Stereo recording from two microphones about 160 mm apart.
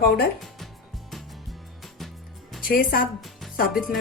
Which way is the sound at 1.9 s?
Centre (ahead or behind).